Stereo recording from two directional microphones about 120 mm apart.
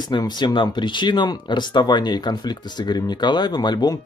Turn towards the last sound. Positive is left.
turn(degrees=35)  # may be behind; listen again after turning